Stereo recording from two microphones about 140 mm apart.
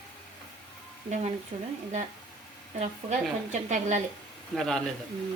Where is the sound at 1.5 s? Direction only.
50° right (ahead or behind).